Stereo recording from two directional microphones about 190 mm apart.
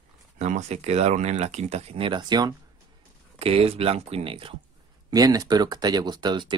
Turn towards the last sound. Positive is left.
turn(degrees=-25)  # may be behind; listen again after turning